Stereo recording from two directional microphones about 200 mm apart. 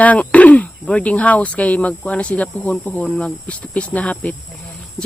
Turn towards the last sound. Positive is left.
turn(degrees=5)  # may be behind; listen again after turning